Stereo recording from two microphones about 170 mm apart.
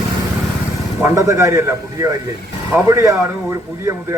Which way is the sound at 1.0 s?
20° right (ahead or behind).